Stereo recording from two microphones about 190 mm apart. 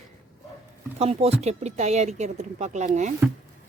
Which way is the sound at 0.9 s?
35° right (ahead or behind).